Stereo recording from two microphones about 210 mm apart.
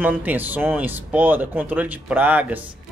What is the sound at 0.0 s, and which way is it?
Speech, 10° right (ahead or behind).